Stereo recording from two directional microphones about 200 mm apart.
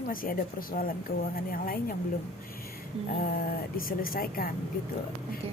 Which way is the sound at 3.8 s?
45° left (ahead or behind).